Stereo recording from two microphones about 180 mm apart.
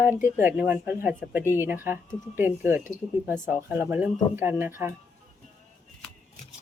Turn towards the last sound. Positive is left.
turn(degrees=-15)  # may be behind; listen again after turning